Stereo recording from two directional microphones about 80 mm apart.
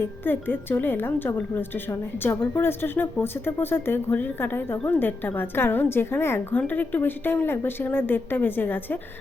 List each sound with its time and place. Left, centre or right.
0.0 s a woman's voice: left